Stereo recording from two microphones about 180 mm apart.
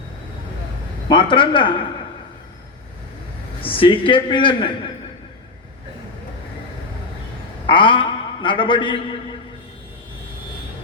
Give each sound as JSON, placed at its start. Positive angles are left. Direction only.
{"t": 1.0, "sound": "speech", "side_deg": 25}
{"t": 3.6, "sound": "speech", "side_deg": 30}
{"t": 7.7, "sound": "a man's voice", "side_deg": 25}